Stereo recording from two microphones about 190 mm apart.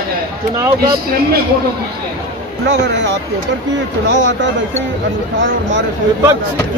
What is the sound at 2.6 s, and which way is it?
Speech, 65° right (ahead or behind).